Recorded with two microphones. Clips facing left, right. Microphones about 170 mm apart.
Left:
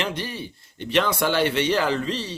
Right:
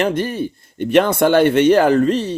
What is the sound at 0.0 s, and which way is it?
Speech, 50° right (ahead or behind).